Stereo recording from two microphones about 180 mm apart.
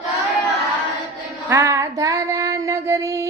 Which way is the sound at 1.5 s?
15° right (ahead or behind).